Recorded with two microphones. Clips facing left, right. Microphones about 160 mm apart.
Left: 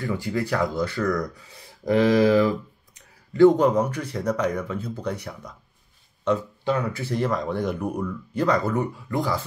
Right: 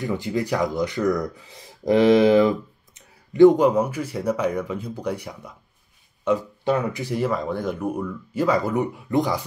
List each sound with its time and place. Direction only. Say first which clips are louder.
0.0 s speech: right 2 dB; 20° right (ahead or behind)
3.3 s speech: right 2 dB; 10° right (ahead or behind)